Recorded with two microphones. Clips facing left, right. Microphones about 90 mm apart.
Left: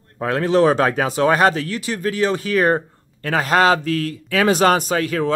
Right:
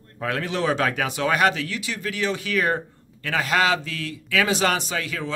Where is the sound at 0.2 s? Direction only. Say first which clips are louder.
Left 9 dB; 35° left (ahead or behind).